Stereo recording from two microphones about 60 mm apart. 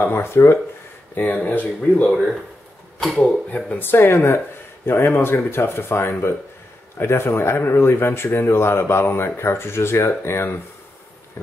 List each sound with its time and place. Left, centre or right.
0.0 s speech: left
1.1 s speech: left
3.1 s speech: left
3.8 s speech: left